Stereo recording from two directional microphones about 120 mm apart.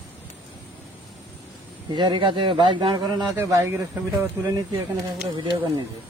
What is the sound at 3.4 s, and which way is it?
Speech, 25° right (ahead or behind).